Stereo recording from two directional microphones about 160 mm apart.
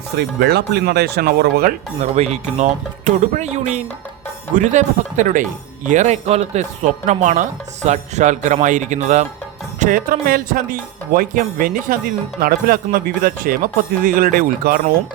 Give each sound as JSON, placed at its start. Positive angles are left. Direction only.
{"t": 0.2, "sound": "speech", "side_deg": -90}
{"t": 2.0, "sound": "speech", "side_deg": -45}
{"t": 9.8, "sound": "speech", "side_deg": -60}